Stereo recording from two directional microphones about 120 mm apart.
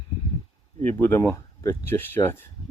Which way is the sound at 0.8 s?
15° left (ahead or behind).